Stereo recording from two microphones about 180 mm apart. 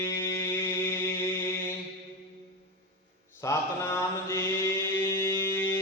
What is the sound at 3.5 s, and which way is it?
Mantra, 15° left (ahead or behind).